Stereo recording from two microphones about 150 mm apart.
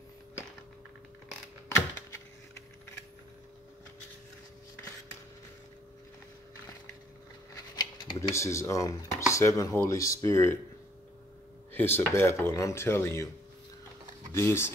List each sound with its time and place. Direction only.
7.7 s scissors: 30° left (ahead or behind)
9.3 s speech: 20° left (ahead or behind)
11.7 s speech: 15° left (ahead or behind)
14.3 s speech: 15° left (ahead or behind)